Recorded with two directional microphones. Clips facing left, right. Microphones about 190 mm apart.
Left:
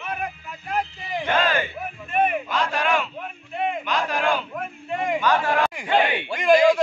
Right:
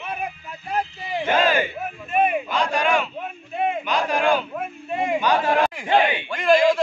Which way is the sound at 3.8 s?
Centre (ahead or behind).